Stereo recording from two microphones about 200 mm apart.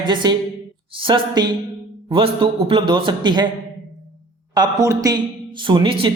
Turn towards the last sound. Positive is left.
turn(degrees=-25)  # may be behind; listen again after turning